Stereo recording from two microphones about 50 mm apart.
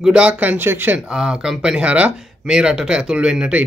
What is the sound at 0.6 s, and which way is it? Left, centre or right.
Speech, right.